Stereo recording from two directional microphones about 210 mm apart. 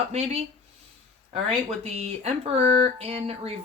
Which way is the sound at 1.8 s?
30° right (ahead or behind).